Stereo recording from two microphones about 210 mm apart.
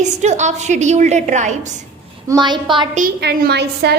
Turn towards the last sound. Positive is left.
turn(degrees=-50)  # may be behind; listen again after turning